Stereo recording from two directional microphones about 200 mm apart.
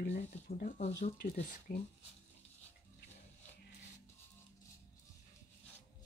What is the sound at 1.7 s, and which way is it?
Speech, 45° left (ahead or behind).